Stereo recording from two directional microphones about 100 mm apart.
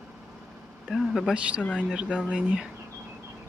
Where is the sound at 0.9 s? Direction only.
Centre (ahead or behind).